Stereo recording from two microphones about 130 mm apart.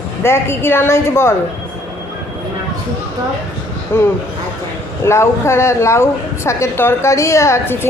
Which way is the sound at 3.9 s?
15° left (ahead or behind).